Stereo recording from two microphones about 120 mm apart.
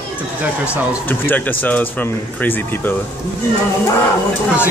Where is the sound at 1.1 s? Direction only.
15° left (ahead or behind).